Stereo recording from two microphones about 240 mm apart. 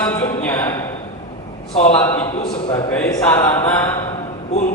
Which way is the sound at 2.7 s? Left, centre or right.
Centre.